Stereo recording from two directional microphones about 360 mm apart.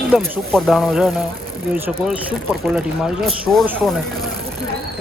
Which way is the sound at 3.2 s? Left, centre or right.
Centre.